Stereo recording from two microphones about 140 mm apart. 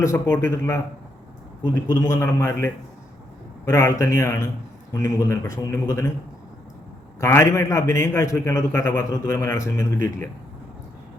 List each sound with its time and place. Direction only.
0.0 s a man's voice: 20° left (ahead or behind)
1.9 s a man's voice: 20° left (ahead or behind)
7.2 s a man's voice: 20° left (ahead or behind)